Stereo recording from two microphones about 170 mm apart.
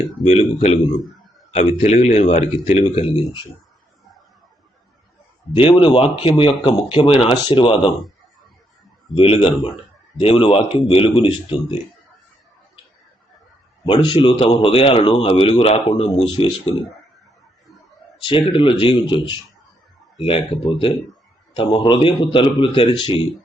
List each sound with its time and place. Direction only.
0.3 s speech: 40° left (ahead or behind)
5.5 s speech: 30° left (ahead or behind)
9.1 s speech: 35° left (ahead or behind)
13.8 s speech: 30° left (ahead or behind)
18.2 s speech: 30° left (ahead or behind)